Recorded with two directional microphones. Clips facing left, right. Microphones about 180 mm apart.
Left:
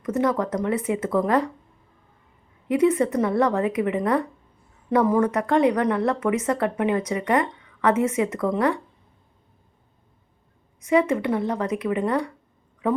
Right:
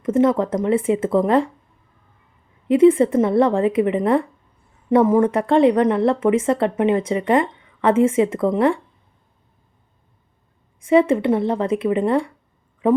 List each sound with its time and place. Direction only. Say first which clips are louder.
0.0 s speech: right 6 dB; 25° right (ahead or behind)
2.6 s speech: right 7 dB; 25° right (ahead or behind)
10.8 s speech: right 5 dB; 30° right (ahead or behind)